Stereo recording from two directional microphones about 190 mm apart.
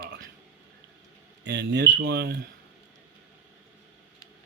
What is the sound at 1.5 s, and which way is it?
Speech, 60° right (ahead or behind).